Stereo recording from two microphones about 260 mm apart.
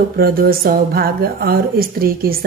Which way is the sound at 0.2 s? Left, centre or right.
Right.